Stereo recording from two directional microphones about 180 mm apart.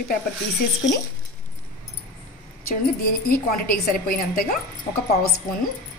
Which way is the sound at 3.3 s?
55° left (ahead or behind).